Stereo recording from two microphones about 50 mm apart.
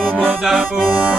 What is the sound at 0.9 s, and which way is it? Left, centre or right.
Accordion, right.